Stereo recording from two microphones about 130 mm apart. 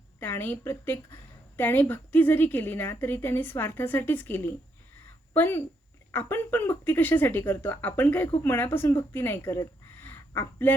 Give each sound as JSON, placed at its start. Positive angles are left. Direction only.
{"t": 0.2, "sound": "a woman's voice", "side_deg": 15}